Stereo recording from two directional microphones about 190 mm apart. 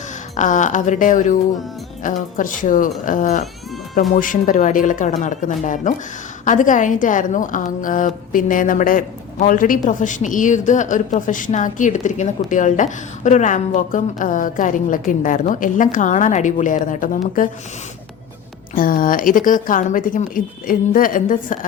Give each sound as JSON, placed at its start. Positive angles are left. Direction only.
{"t": 0.3, "sound": "a woman's voice", "side_deg": 40}
{"t": 18.7, "sound": "a woman's voice", "side_deg": 45}